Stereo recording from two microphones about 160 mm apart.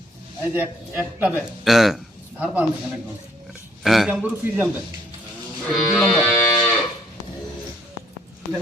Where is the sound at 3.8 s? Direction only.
Centre (ahead or behind).